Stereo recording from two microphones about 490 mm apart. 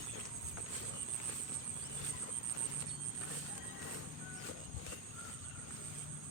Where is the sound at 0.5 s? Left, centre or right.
Right.